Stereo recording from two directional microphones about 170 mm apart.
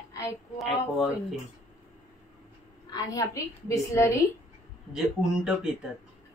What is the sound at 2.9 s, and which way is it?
A woman's voice, 20° left (ahead or behind).